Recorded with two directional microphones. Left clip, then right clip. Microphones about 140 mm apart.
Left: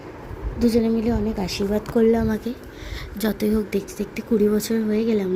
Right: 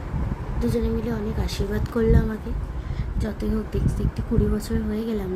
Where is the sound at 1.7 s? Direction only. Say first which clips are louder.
Left 5 dB; 20° left (ahead or behind).